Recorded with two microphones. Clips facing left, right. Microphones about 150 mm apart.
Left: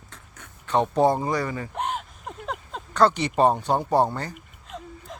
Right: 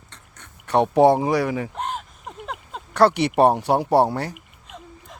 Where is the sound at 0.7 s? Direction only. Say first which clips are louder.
Right 5 dB; 70° right (ahead or behind).